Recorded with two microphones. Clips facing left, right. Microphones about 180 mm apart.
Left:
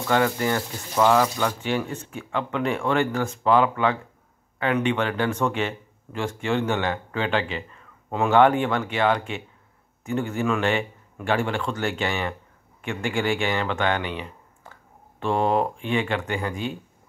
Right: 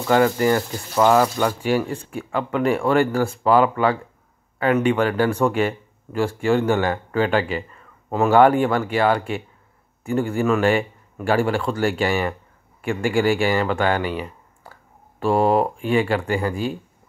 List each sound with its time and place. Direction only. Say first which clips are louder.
0.4 s speech: right 6 dB; 10° right (ahead or behind)
14.1 s a sound: right 5 dB; 40° right (ahead or behind)
15.1 s speech: right 4 dB; 5° right (ahead or behind)